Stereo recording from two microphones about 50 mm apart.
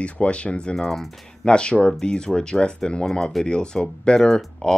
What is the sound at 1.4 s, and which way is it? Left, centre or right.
Speech, centre.